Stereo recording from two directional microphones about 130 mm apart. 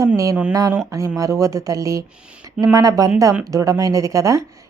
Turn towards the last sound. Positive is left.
turn(degrees=-25)  # may be behind; listen again after turning